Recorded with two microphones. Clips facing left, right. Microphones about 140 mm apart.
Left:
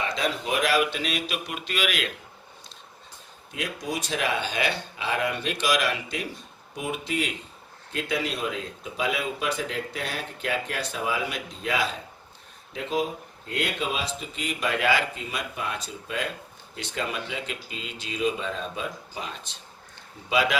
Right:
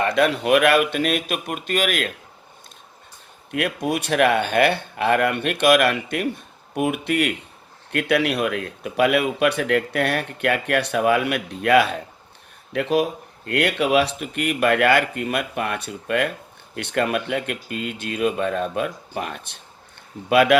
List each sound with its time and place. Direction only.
0.0 s speech: 60° right (ahead or behind)
3.5 s speech: 65° right (ahead or behind)